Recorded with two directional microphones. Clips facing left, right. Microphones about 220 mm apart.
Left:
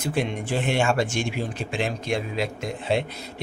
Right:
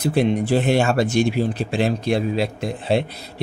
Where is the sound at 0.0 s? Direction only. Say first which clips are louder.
Right 8 dB; 35° right (ahead or behind).